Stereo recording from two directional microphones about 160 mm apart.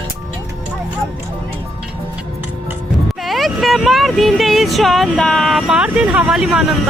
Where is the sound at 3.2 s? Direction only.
Centre (ahead or behind).